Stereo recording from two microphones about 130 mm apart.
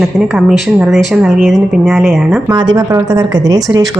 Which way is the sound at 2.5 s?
30° right (ahead or behind).